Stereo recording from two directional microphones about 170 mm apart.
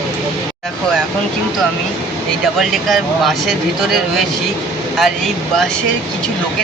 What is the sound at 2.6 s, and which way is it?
Speech, centre (ahead or behind).